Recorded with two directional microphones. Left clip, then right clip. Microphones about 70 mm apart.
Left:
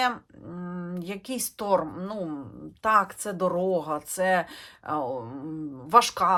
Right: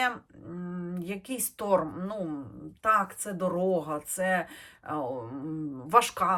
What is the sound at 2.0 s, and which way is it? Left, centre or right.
Speech, left.